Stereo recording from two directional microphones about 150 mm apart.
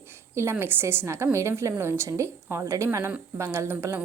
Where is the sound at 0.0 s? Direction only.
15° right (ahead or behind).